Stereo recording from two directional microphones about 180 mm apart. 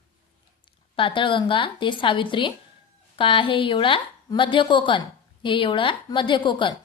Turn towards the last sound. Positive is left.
turn(degrees=25)  # may be behind; listen again after turning